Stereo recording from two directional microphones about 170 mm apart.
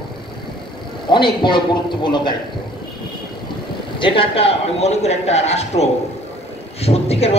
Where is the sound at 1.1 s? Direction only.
25° left (ahead or behind).